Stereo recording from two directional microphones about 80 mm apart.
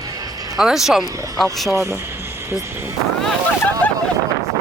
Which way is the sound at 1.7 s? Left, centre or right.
Right.